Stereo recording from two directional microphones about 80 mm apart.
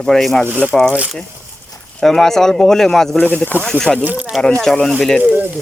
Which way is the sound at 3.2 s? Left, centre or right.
Left.